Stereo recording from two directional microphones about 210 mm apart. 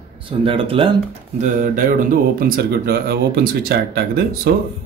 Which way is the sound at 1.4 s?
40° right (ahead or behind).